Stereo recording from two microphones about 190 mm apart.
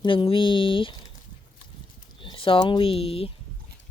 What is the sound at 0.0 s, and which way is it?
Speech, 25° left (ahead or behind).